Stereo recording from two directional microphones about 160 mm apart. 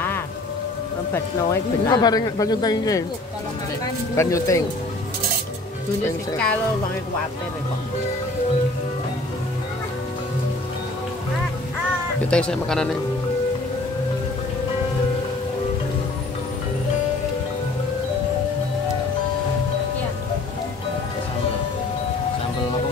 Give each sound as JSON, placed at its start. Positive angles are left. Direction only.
{"t": 1.1, "sound": "speech", "side_deg": 20}
{"t": 12.3, "sound": "speech", "side_deg": 5}